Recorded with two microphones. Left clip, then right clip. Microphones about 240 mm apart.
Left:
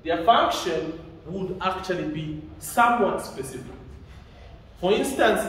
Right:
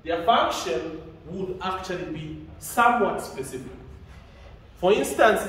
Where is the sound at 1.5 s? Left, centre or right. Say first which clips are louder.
Left 4 dB; centre.